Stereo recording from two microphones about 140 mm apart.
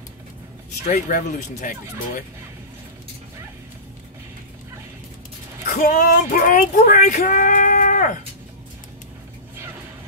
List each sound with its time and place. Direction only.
0.8 s speech: 60° left (ahead or behind)
5.7 s speech: 65° left (ahead or behind)